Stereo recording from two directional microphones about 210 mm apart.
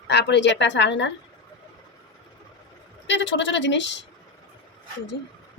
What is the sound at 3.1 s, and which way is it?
Speech, 60° left (ahead or behind).